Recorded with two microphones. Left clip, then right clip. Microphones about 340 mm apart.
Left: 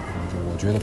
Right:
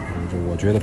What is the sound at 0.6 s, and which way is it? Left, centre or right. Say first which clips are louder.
Speech: right 5 dB; centre.